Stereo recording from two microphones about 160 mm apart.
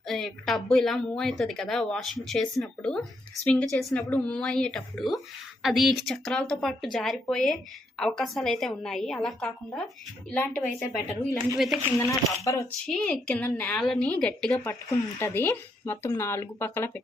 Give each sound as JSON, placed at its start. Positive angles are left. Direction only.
{"t": 0.1, "sound": "speech", "side_deg": 0}
{"t": 10.3, "sound": "a woman's voice", "side_deg": 15}
{"t": 11.5, "sound": "speech", "side_deg": 0}
{"t": 11.9, "sound": "a woman's voice", "side_deg": 20}
{"t": 12.8, "sound": "a woman's voice", "side_deg": 5}